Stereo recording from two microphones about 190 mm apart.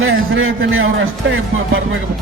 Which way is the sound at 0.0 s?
90° right.